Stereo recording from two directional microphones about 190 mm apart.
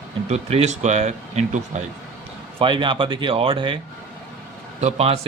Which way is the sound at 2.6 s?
25° right (ahead or behind).